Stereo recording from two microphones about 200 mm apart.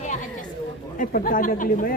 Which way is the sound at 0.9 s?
45° left (ahead or behind).